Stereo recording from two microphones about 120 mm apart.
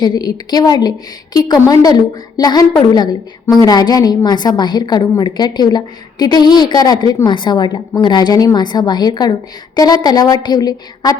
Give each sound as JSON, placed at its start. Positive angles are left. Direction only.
{"t": 0.0, "sound": "a woman's voice", "side_deg": 35}